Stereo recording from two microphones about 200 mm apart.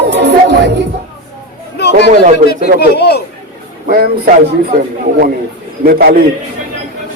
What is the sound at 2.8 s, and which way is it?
Speech, 55° left (ahead or behind).